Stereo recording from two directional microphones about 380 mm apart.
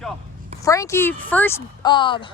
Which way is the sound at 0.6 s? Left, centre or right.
Centre.